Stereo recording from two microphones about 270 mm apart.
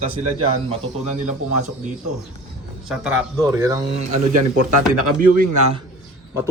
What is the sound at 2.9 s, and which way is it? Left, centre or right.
A man's voice, centre.